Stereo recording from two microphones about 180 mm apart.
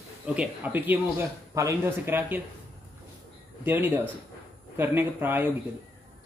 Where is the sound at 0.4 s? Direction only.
10° right (ahead or behind).